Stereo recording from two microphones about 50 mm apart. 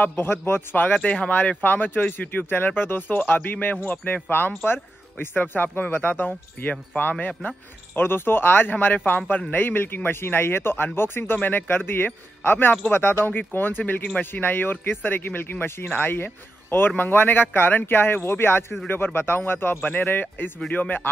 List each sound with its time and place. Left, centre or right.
0.0 s a man's voice: left
1.0 s speech: centre
1.6 s speech: left
7.9 s a man's voice: left
13.3 s a man's voice: left